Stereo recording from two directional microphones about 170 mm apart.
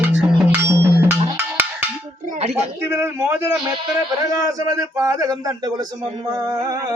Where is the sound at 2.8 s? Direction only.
15° right (ahead or behind).